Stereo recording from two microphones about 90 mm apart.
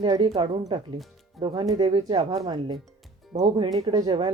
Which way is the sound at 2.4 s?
55° right (ahead or behind).